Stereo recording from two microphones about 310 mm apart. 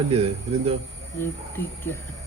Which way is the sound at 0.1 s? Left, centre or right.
Centre.